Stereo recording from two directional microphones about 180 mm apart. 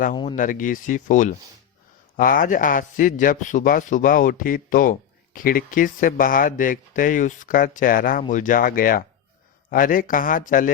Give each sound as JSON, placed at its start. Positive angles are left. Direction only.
{"t": 0.3, "sound": "a man's voice", "side_deg": 45}